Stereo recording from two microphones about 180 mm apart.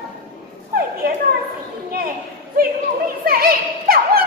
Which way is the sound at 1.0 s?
60° right (ahead or behind).